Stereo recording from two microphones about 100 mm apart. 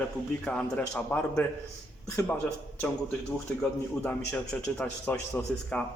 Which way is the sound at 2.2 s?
25° left (ahead or behind).